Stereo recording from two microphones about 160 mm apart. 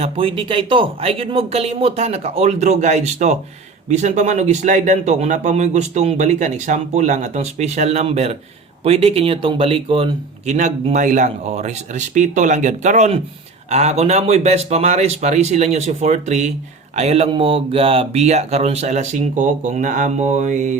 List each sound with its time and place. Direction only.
0.0 s speech: 35° right (ahead or behind); by 20.7 s 50° right (ahead or behind)